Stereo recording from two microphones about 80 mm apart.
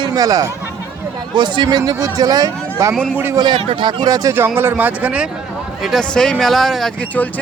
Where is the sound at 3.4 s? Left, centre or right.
Right.